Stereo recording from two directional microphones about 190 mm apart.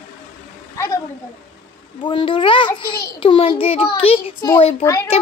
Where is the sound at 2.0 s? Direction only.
25° left (ahead or behind).